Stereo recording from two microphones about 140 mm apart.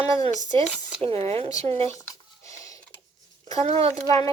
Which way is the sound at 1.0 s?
45° right (ahead or behind).